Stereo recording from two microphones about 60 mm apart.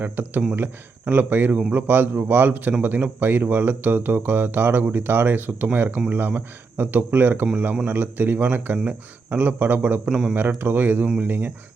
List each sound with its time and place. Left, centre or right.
0.0 s speech: right
10.1 s speech: centre
10.6 s speech: right